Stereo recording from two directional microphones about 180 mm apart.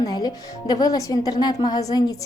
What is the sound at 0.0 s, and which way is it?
A woman's voice, 20° left (ahead or behind).